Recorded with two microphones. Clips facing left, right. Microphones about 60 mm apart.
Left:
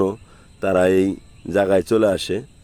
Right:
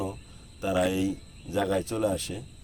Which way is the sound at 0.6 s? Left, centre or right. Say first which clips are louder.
Left 10 dB; left.